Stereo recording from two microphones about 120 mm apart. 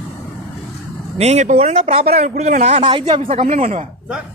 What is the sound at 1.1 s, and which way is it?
Speech, 65° right (ahead or behind).